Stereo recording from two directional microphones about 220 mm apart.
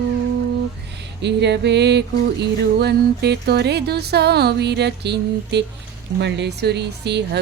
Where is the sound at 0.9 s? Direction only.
50° right (ahead or behind).